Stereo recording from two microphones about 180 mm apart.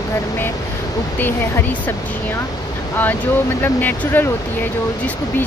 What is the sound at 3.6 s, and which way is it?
Speech, 10° left (ahead or behind).